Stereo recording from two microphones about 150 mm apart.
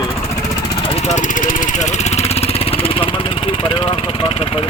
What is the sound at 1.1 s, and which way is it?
Speech, 60° left (ahead or behind).